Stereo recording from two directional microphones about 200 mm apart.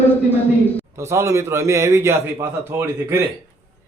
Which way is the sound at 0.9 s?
15° right (ahead or behind).